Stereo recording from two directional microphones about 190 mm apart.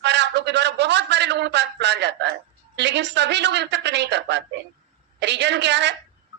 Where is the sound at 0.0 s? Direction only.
65° right (ahead or behind).